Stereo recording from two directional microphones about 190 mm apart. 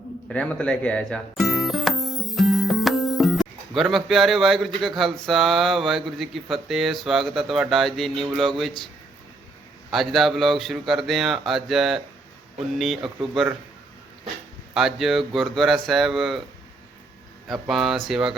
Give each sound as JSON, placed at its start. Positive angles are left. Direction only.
{"t": 0.3, "sound": "speech", "side_deg": 5}
{"t": 9.9, "sound": "speech", "side_deg": 0}
{"t": 14.7, "sound": "speech", "side_deg": 0}
{"t": 17.5, "sound": "speech", "side_deg": 0}